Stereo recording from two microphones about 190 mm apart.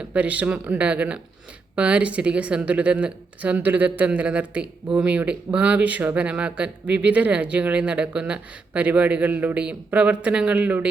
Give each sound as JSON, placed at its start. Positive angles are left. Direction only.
{"t": 0.0, "sound": "speech", "side_deg": -5}